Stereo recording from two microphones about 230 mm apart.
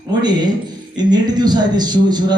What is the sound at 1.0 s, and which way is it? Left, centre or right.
A man's voice, centre.